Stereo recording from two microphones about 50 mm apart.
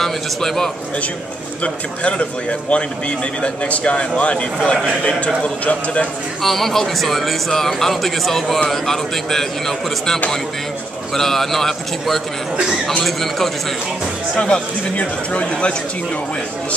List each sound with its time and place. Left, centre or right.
0.0 s a man's voice: centre
1.6 s speech: left
6.4 s a man's voice: centre
14.3 s speech: left